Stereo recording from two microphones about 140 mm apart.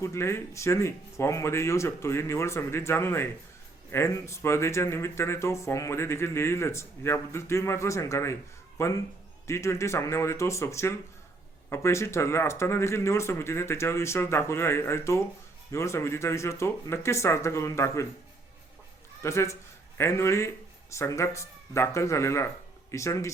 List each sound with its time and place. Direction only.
0.0 s speech: 20° left (ahead or behind)
19.2 s speech: 20° left (ahead or behind)